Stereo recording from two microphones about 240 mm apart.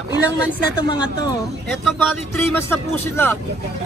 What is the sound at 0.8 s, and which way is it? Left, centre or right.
Speech, centre.